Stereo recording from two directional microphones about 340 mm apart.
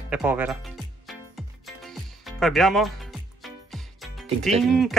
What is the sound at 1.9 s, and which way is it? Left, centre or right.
Music, centre.